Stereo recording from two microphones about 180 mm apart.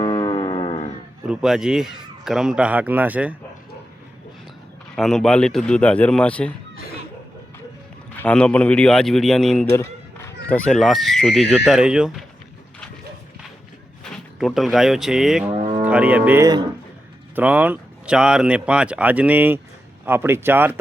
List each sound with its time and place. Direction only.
0.0 s music: 25° left (ahead or behind)
1.3 s speech: 5° right (ahead or behind)
4.9 s speech: 5° left (ahead or behind)
8.1 s speech: 10° left (ahead or behind)
9.7 s speech: 15° left (ahead or behind); by 12.2 s 5° right (ahead or behind)
14.0 s speech: centre (ahead or behind)
15.5 s foghorn: 40° right (ahead or behind)
15.8 s speech: 5° right (ahead or behind)